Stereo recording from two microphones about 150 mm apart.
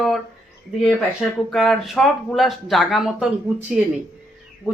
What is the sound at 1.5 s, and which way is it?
Speech, centre (ahead or behind).